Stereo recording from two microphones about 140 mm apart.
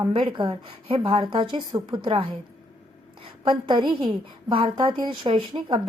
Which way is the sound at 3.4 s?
35° right (ahead or behind).